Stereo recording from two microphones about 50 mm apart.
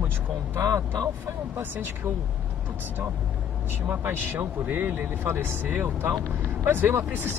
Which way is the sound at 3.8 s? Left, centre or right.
Right.